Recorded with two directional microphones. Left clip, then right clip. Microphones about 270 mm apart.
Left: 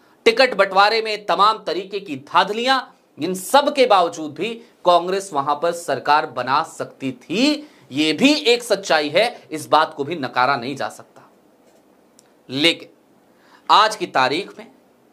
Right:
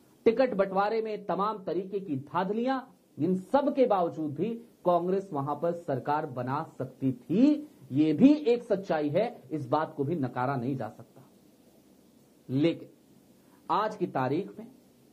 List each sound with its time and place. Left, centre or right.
0.2 s speech: centre
4.0 s speech: left
4.3 s speech: centre
12.4 s speech: centre